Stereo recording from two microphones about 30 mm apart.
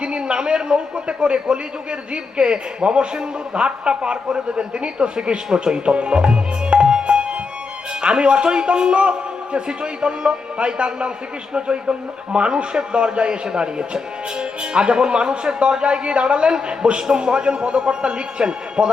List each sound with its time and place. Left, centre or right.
0.0 s a man's voice: right
7.1 s music: right
8.0 s a man's voice: right